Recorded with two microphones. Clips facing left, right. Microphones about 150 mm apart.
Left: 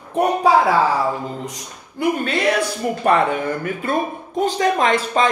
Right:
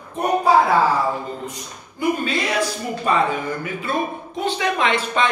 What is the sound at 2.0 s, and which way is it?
A man's voice, 60° left (ahead or behind).